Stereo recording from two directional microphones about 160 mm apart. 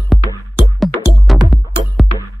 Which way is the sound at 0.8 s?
Centre (ahead or behind).